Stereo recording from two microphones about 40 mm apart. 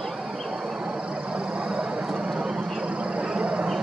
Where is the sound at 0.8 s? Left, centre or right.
Right.